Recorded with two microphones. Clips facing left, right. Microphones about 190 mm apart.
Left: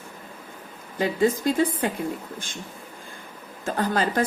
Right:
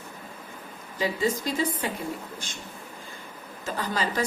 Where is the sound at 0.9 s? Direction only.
55° left (ahead or behind).